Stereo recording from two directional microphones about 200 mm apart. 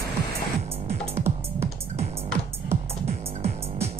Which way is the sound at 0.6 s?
30° right (ahead or behind).